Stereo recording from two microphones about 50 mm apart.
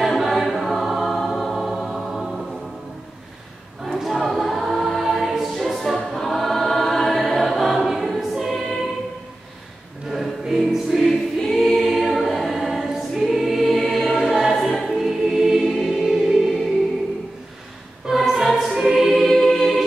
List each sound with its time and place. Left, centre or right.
0.0 s music: centre
3.8 s choir: centre
10.0 s choir: centre
18.0 s music: centre
19.2 s choir: centre